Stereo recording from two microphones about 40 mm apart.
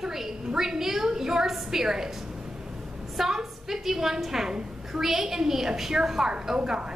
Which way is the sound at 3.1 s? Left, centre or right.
Centre.